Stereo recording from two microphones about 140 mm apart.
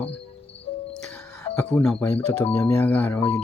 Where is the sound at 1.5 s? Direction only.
10° left (ahead or behind).